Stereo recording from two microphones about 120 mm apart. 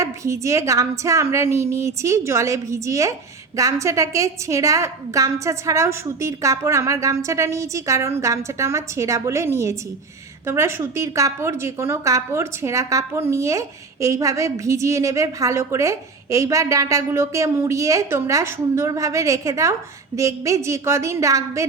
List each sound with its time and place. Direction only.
0.0 s a woman's voice: 25° right (ahead or behind)